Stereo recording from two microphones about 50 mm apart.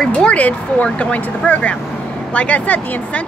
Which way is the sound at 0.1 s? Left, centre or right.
Left.